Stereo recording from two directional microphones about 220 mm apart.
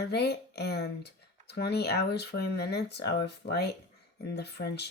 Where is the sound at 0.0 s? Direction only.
45° left (ahead or behind).